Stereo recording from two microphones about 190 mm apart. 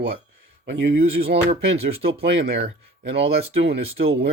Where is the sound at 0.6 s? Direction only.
65° right (ahead or behind).